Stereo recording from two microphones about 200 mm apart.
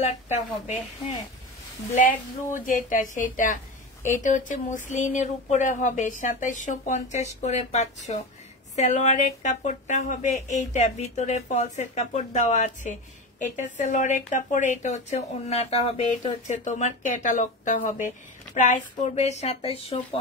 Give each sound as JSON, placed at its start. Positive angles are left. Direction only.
{"t": 0.0, "sound": "a woman's voice", "side_deg": 35}
{"t": 2.6, "sound": "a woman's voice", "side_deg": 40}